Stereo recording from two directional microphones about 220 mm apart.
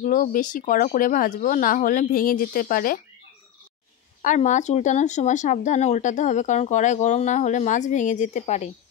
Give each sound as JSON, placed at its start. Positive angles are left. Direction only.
{"t": 0.0, "sound": "speech", "side_deg": 35}
{"t": 4.2, "sound": "speech", "side_deg": 35}